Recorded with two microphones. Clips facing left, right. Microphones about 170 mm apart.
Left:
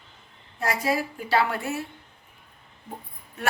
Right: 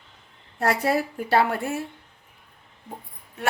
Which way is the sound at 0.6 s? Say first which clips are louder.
Right 3 dB; 60° right (ahead or behind).